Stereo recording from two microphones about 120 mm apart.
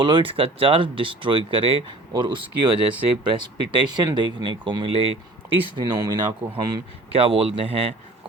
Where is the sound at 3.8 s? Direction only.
35° right (ahead or behind).